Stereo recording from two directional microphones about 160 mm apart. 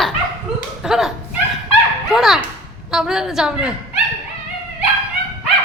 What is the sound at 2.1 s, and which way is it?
Ping, centre (ahead or behind).